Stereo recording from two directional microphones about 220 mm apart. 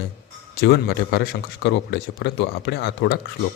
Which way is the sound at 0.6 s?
45° left (ahead or behind).